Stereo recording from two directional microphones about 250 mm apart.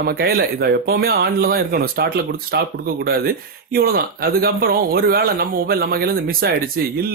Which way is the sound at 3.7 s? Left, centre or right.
Right.